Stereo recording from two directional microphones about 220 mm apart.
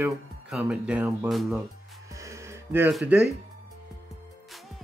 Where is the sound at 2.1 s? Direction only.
15° right (ahead or behind).